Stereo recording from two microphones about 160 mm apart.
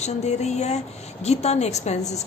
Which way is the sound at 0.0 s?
45° left (ahead or behind).